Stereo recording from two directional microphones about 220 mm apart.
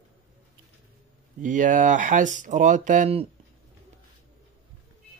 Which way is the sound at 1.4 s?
35° right (ahead or behind).